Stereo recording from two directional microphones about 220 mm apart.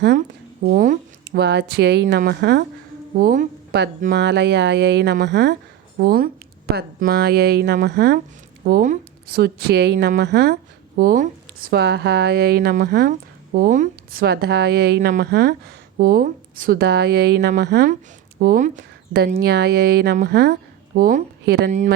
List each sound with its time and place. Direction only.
0.2 s a woman's voice: 40° right (ahead or behind)
11.7 s a woman's voice: 50° right (ahead or behind)
21.7 s speech: 35° right (ahead or behind)